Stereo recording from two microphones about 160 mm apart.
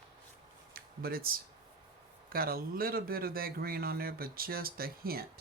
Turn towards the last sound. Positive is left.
turn(degrees=-70)  # may be behind; listen again after turning